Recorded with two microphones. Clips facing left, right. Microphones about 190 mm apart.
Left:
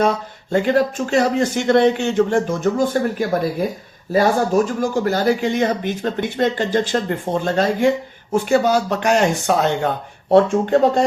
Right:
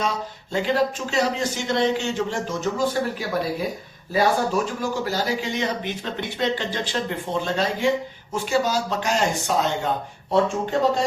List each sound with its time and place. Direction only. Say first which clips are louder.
0.0 s speech: left 8 dB; 55° left (ahead or behind)